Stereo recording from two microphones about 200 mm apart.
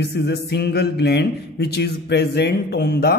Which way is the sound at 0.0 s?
55° left (ahead or behind).